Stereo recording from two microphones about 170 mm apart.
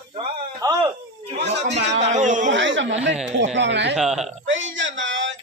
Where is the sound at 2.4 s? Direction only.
90° right.